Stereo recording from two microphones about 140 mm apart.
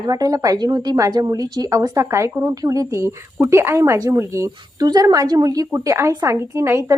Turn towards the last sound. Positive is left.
turn(degrees=-20)  # may be behind; listen again after turning